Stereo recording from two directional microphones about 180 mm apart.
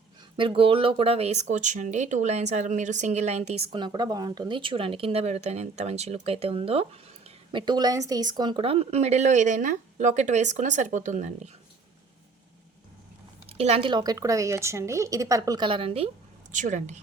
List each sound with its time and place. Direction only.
0.3 s speech: 30° right (ahead or behind)
13.5 s speech: 35° right (ahead or behind)
16.5 s a woman's voice: 45° right (ahead or behind)